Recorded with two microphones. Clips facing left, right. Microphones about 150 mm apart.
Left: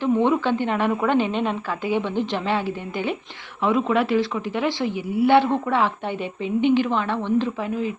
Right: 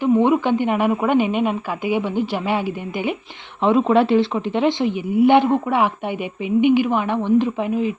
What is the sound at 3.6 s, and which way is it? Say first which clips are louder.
A woman's voice: right 5 dB; 30° right (ahead or behind).